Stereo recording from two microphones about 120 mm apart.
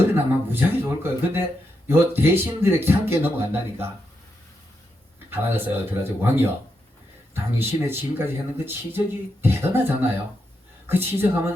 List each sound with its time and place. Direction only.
0.1 s speech: 20° right (ahead or behind)
5.3 s speech: 20° right (ahead or behind)